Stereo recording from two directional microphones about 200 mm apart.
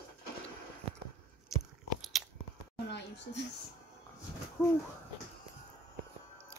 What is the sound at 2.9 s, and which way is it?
Speech, 60° left (ahead or behind).